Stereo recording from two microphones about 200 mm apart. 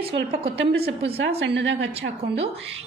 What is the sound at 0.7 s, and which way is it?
A woman's voice, 55° right (ahead or behind).